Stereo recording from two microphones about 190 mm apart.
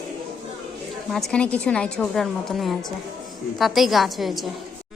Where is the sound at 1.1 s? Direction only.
Centre (ahead or behind).